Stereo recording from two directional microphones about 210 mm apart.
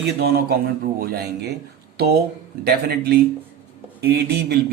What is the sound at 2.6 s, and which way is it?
A man's voice, 50° right (ahead or behind).